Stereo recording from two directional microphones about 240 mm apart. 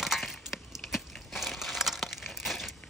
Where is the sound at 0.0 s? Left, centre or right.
Centre.